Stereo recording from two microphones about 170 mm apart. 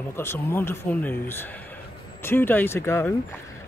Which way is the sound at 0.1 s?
15° left (ahead or behind).